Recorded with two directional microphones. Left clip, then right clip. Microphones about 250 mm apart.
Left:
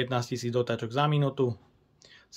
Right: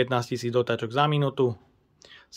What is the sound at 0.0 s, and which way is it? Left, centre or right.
Speech, centre.